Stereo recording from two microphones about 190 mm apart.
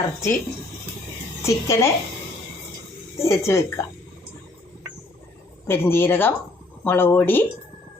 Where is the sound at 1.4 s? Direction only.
15° left (ahead or behind).